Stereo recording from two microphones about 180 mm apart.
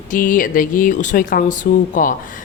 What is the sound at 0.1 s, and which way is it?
A woman's voice, 50° left (ahead or behind).